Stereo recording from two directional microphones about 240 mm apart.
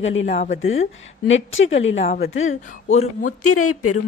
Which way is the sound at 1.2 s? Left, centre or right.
Left.